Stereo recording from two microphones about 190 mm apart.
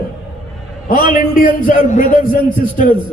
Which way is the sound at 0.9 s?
45° left (ahead or behind).